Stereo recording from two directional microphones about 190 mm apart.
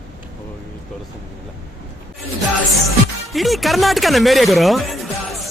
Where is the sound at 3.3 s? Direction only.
Centre (ahead or behind).